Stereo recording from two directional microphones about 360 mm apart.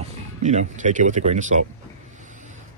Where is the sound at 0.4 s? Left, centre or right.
Centre.